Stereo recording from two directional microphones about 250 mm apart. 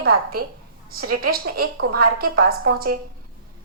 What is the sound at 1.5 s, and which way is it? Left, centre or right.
A woman's voice, right.